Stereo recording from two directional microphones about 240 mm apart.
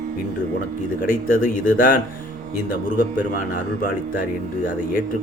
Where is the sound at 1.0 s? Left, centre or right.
Left.